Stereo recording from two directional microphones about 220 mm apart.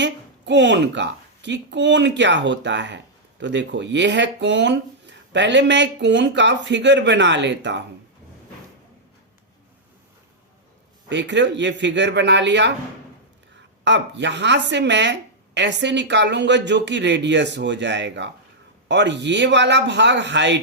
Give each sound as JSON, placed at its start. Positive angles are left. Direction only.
{"t": 0.0, "sound": "speech", "side_deg": -55}
{"t": 11.1, "sound": "speech", "side_deg": -55}
{"t": 13.8, "sound": "speech", "side_deg": -55}